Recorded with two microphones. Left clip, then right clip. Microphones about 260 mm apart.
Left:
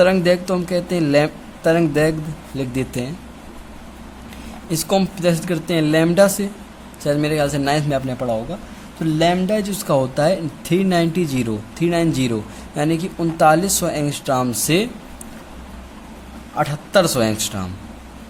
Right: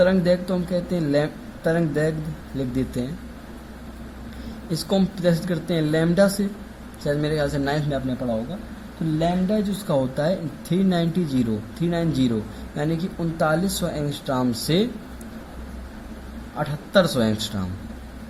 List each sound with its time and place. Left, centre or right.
0.0 s speech: left
4.9 s speech: left
16.6 s speech: left